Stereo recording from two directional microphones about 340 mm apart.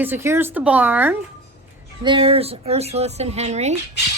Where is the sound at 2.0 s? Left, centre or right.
Centre.